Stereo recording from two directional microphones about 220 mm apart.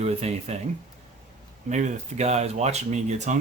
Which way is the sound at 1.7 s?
30° right (ahead or behind).